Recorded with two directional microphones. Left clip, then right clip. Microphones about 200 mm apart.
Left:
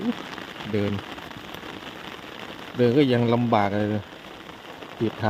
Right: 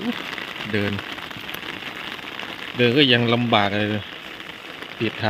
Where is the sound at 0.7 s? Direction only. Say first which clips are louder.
Right 2 dB; centre (ahead or behind).